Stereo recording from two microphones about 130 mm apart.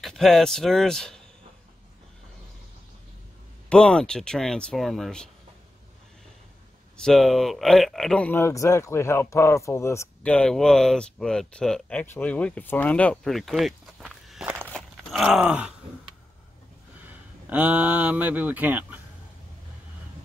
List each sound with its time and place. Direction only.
0.0 s speech: centre (ahead or behind)
3.6 s speech: 5° left (ahead or behind)
7.0 s speech: centre (ahead or behind)
8.4 s speech: 20° left (ahead or behind)
10.2 s speech: 10° left (ahead or behind); by 14.7 s 10° right (ahead or behind)
14.7 s groan: centre (ahead or behind)
17.0 s speech: 10° right (ahead or behind)